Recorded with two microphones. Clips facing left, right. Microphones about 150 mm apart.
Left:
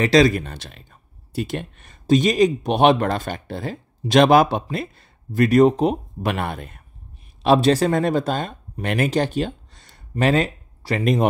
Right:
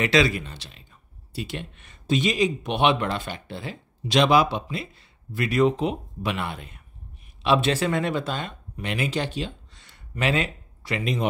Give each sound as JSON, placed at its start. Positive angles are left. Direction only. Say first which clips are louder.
{"t": 0.0, "sound": "speech", "louder": "left 6 dB", "side_deg": 40}